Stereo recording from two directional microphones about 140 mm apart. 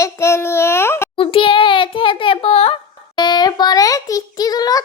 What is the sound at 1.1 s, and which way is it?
Speech, 40° left (ahead or behind).